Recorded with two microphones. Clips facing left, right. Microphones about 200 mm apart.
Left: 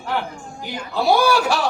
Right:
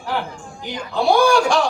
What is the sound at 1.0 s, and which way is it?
Speech, 5° left (ahead or behind).